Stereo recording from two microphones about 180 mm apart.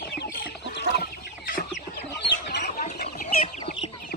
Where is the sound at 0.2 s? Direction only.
65° left (ahead or behind).